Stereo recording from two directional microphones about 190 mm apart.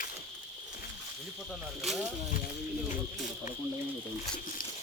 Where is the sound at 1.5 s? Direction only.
Centre (ahead or behind).